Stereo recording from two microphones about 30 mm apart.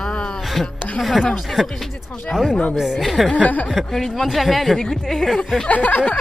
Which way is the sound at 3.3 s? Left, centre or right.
Left.